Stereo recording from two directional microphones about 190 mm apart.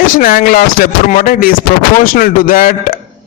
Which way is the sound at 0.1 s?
45° left (ahead or behind).